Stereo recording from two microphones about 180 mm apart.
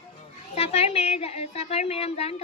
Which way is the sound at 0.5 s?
35° left (ahead or behind).